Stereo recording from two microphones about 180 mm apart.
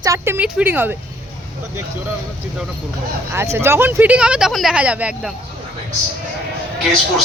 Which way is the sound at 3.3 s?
15° right (ahead or behind).